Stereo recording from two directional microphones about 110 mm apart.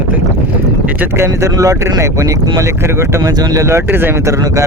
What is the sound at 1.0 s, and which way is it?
Speech, 25° right (ahead or behind).